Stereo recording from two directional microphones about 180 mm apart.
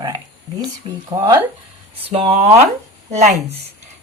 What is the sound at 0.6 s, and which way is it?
Speech, 25° right (ahead or behind).